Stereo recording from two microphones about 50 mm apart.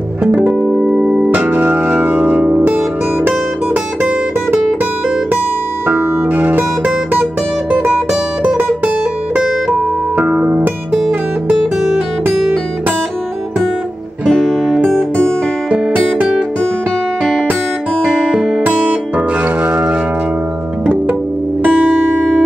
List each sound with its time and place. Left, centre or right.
0.5 s music: centre
1.4 s music: right
5.9 s music: right
10.1 s music: right
15.7 s music: right
19.4 s music: right
21.6 s music: right